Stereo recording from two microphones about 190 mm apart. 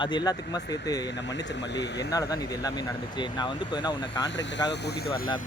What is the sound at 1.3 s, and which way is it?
Speech, 70° left (ahead or behind).